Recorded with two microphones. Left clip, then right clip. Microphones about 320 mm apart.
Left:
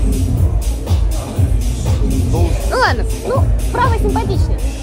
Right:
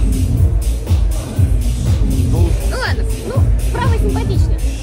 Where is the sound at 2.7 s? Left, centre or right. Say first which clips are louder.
Left 9 dB; centre.